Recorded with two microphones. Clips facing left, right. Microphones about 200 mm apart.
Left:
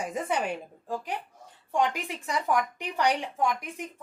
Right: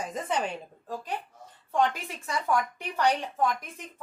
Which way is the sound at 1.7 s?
15° left (ahead or behind).